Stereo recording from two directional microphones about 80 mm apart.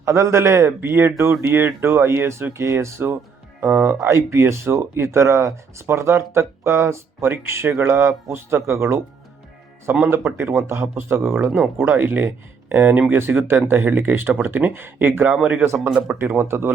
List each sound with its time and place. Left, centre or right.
0.0 s speech: right
10.1 s speech: right
15.6 s speech: right